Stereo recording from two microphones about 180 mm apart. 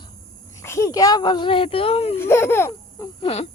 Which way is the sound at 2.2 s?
15° left (ahead or behind).